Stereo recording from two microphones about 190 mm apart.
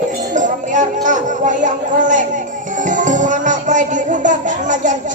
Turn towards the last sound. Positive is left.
turn(degrees=-40)  # may be behind; listen again after turning